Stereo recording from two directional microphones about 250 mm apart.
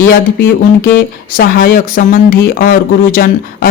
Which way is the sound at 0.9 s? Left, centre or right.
Left.